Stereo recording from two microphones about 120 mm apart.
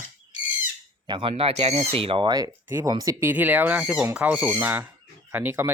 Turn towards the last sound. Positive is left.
turn(degrees=-15)  # may be behind; listen again after turning